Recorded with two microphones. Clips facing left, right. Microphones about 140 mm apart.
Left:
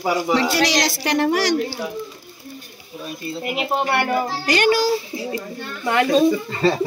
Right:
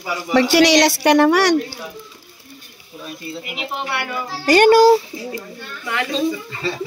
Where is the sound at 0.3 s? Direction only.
80° right.